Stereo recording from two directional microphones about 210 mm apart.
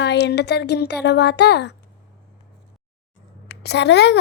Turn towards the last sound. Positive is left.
turn(degrees=55)  # may be behind; listen again after turning